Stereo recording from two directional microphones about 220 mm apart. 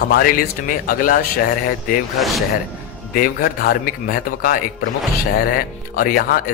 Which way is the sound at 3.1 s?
40° left (ahead or behind).